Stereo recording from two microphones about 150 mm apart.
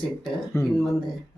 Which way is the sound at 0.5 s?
20° left (ahead or behind).